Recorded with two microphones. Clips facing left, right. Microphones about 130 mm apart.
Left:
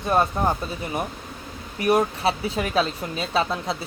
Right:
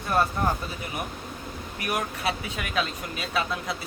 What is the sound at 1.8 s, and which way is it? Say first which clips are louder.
Speech: left 9 dB; 30° left (ahead or behind).